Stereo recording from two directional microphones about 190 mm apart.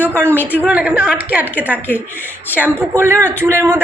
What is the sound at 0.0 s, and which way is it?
A woman's voice, 10° right (ahead or behind).